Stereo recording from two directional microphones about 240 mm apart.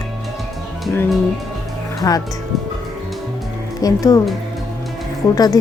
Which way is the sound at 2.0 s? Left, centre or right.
Centre.